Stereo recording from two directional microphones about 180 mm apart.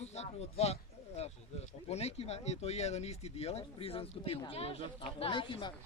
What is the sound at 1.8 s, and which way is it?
Speech, 35° left (ahead or behind).